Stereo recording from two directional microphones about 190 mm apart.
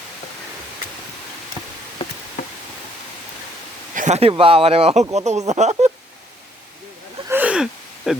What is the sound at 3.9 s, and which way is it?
Speech, 40° right (ahead or behind).